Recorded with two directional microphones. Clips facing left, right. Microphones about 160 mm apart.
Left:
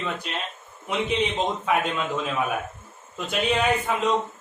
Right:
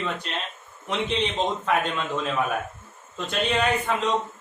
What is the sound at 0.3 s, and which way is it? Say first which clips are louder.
A man's voice: even; 5° left (ahead or behind).